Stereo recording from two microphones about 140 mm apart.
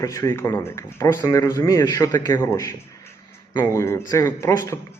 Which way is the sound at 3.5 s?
30° left (ahead or behind).